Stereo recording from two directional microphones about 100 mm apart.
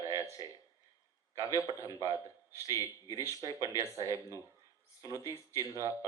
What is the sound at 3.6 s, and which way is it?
Speech, 30° right (ahead or behind).